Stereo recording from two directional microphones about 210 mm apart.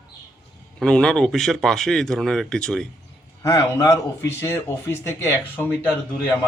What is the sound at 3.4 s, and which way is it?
Speech, 15° left (ahead or behind).